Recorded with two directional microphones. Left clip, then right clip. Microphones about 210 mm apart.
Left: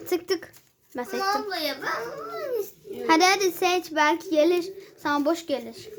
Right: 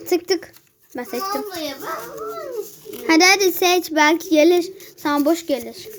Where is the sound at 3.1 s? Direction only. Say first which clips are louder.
Right 6 dB; 15° right (ahead or behind).